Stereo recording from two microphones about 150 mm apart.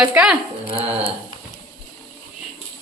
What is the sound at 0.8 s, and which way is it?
Speech, 40° right (ahead or behind).